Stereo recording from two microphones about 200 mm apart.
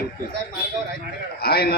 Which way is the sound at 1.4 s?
50° left (ahead or behind).